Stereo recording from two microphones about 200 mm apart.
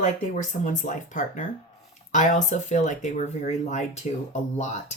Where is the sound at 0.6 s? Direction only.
40° left (ahead or behind).